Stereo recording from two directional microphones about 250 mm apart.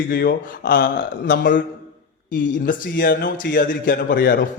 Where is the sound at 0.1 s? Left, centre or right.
Left.